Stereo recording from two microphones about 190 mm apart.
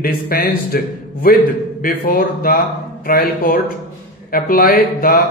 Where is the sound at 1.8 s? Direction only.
50° left (ahead or behind).